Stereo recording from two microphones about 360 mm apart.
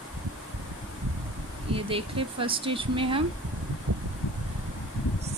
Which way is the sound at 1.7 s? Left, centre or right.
Centre.